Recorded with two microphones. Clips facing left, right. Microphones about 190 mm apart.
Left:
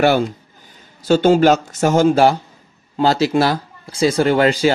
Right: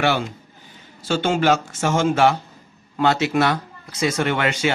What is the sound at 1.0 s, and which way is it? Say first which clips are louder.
Speech: left 7 dB; 40° left (ahead or behind).